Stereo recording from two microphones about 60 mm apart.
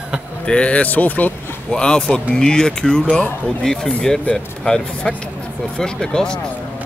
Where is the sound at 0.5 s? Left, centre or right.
Centre.